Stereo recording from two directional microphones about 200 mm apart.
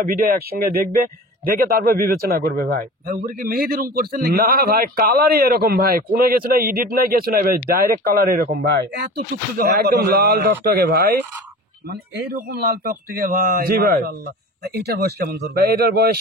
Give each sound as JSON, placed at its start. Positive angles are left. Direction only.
{"t": 0.0, "sound": "a man's voice", "side_deg": -50}